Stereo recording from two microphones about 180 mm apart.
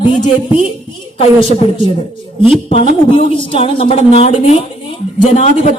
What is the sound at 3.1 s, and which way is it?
A woman's voice, 30° left (ahead or behind).